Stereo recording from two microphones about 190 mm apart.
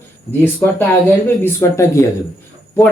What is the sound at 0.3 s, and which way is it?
Speech, 10° left (ahead or behind).